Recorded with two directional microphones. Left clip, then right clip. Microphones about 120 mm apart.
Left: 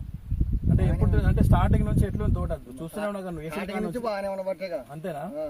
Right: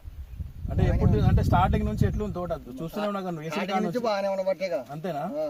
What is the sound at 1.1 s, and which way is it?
Speech, 40° left (ahead or behind).